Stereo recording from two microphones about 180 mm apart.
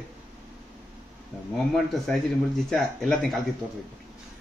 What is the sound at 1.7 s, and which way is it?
Speech, centre (ahead or behind).